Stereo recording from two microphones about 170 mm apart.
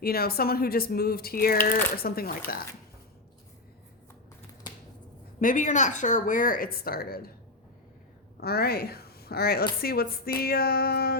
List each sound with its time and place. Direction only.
0.0 s speech: 65° left (ahead or behind)
5.4 s speech: 50° left (ahead or behind)
8.4 s a woman's voice: 65° left (ahead or behind)